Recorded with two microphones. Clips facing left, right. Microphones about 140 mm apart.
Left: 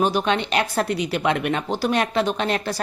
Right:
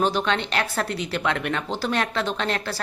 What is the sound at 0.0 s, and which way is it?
A woman's voice, 15° left (ahead or behind).